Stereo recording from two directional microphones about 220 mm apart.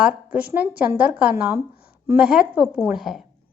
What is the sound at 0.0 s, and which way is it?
A woman's voice, 5° right (ahead or behind).